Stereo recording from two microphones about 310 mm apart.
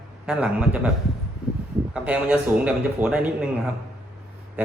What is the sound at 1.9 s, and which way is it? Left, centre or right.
A man's voice, centre.